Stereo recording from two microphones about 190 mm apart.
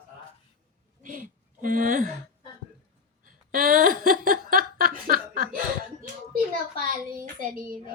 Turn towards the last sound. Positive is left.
turn(degrees=-45)  # may be behind; listen again after turning